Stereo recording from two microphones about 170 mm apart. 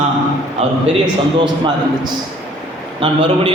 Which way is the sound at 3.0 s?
30° right (ahead or behind).